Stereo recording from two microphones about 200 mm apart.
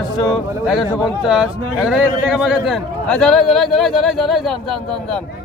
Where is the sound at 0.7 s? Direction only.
5° right (ahead or behind).